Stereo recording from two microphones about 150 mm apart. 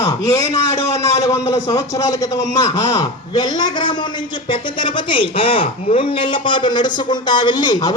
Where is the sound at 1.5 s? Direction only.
25° left (ahead or behind).